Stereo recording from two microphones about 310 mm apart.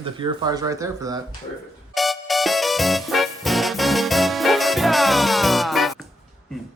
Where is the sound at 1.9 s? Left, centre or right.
Centre.